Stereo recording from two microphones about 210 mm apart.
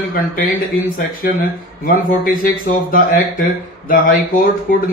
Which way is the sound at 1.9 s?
40° left (ahead or behind).